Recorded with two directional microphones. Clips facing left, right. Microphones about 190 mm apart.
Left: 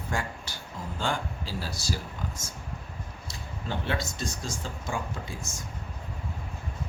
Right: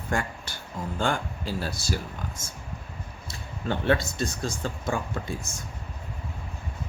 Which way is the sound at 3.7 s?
60° right (ahead or behind).